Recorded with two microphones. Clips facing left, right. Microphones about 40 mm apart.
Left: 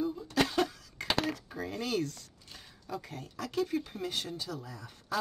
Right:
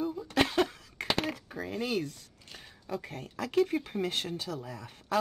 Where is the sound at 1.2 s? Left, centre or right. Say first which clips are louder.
Even; centre.